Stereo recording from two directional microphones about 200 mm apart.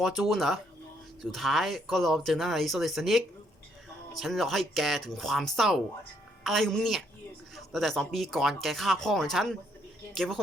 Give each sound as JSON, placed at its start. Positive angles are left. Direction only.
{"t": 0.0, "sound": "speech", "side_deg": 0}